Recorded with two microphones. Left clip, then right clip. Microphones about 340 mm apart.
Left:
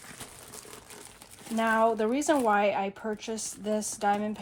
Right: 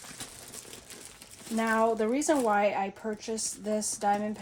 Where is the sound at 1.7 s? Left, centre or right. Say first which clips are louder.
Left 1 dB; left.